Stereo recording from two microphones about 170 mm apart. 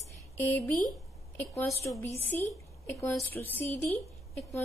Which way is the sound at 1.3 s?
15° left (ahead or behind).